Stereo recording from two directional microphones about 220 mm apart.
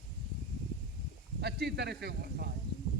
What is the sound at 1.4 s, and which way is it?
A man's voice, 50° right (ahead or behind).